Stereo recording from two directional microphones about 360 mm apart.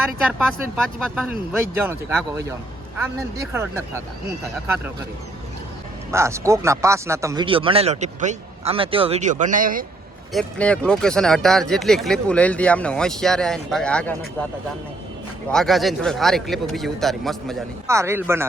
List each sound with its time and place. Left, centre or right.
0.9 s speech: centre
6.1 s speech: centre; by 9.8 s right
10.3 s speech: centre
15.4 s speech: centre